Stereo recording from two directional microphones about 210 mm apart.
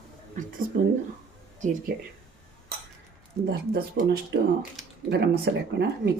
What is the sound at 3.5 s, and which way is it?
Speech, 50° right (ahead or behind).